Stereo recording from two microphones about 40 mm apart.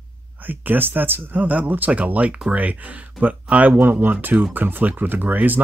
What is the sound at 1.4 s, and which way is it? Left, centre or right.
Speech, right.